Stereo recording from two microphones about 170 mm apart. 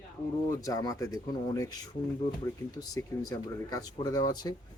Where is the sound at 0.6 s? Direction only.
20° left (ahead or behind).